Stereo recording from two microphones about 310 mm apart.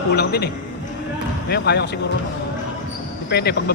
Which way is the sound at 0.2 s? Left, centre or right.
Left.